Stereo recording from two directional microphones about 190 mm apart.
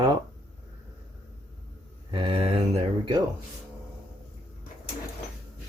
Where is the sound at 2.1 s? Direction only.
25° right (ahead or behind).